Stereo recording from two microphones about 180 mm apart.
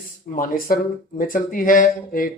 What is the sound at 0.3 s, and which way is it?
Speech, 50° left (ahead or behind).